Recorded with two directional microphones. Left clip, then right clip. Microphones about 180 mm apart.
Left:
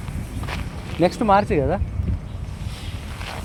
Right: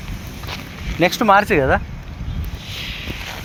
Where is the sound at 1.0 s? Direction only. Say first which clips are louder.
Right 4 dB; 5° right (ahead or behind).